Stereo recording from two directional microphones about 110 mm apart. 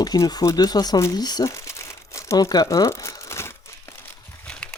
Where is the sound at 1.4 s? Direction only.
25° left (ahead or behind).